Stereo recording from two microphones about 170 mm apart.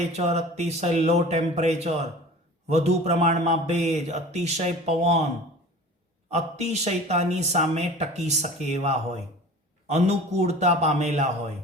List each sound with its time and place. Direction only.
0.1 s speech: 40° right (ahead or behind)
6.3 s speech: 40° right (ahead or behind)